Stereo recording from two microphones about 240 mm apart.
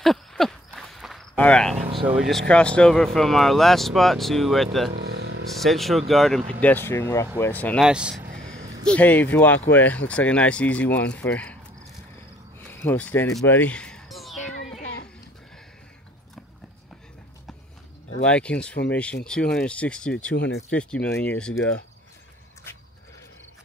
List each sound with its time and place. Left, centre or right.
0.0 s walk: centre
1.8 s vehicle: right
2.0 s speech: centre
5.1 s a sound: right
5.6 s speech: centre
12.5 s a sound: centre
18.2 s speech: centre
20.3 s speech: left
20.7 s speech: centre